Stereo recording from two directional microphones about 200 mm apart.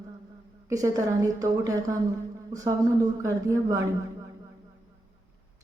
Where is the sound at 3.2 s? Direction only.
15° right (ahead or behind).